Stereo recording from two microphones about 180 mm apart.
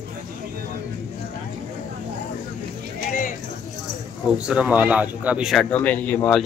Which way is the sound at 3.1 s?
45° left (ahead or behind).